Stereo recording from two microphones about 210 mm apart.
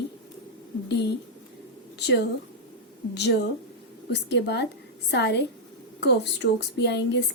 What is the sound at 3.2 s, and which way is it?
A woman's voice, 55° left (ahead or behind).